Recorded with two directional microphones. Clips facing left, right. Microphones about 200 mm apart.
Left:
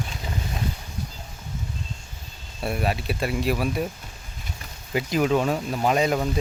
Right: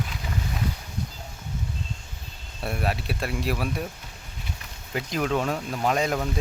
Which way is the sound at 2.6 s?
Centre (ahead or behind).